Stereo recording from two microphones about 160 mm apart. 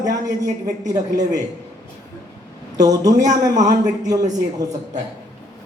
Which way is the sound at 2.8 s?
20° right (ahead or behind).